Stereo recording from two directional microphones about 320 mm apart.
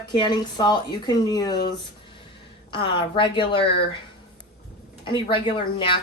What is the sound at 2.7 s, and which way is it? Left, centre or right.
Speech, centre.